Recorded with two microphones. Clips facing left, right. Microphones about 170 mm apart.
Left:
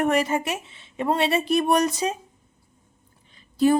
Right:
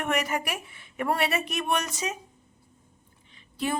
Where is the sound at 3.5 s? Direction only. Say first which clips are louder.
Left 11 dB; 35° left (ahead or behind).